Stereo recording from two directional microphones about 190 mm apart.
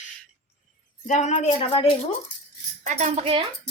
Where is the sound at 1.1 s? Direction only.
40° left (ahead or behind).